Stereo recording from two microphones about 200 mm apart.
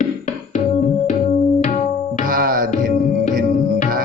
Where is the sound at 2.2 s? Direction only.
45° right (ahead or behind).